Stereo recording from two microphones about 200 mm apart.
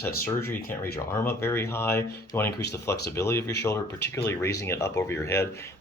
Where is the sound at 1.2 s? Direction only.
10° left (ahead or behind).